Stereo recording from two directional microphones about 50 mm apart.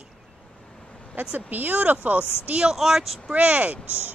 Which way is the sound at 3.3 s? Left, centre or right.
Right.